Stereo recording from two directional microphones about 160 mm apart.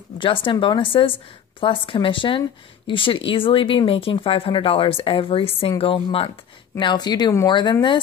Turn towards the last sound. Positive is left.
turn(degrees=30)  # may be behind; listen again after turning